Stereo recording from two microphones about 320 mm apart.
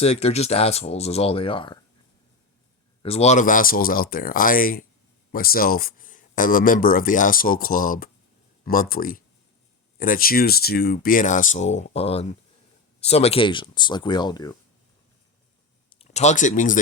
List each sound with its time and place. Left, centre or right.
0.0 s speech: centre
3.0 s speech: centre
15.9 s speech: centre